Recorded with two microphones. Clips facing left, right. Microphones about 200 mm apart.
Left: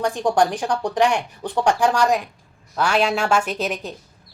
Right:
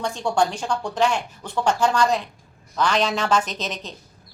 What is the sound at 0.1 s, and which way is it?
A woman's voice, 15° left (ahead or behind).